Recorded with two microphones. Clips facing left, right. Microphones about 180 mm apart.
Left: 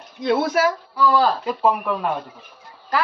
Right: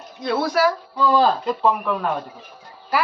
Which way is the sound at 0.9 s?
20° right (ahead or behind).